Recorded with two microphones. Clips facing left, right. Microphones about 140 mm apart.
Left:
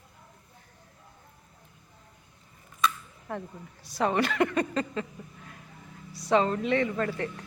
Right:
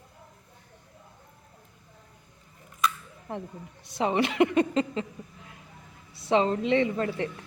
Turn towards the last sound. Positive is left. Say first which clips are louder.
# right 1 dB
turn(degrees=-25)  # may be behind; listen again after turning